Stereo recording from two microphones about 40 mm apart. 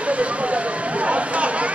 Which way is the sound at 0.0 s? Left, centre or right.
Right.